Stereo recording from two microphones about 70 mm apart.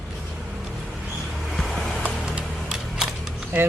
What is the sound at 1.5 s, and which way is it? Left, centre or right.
Music, centre.